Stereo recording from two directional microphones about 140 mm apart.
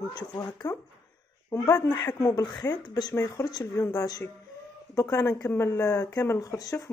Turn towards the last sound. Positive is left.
turn(degrees=20)  # may be behind; listen again after turning